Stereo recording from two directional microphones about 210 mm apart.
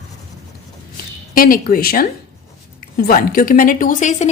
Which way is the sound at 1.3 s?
40° left (ahead or behind).